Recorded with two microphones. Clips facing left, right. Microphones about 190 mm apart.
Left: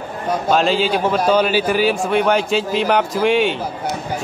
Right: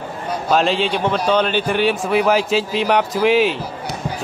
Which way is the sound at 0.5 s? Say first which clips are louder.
Even; centre (ahead or behind).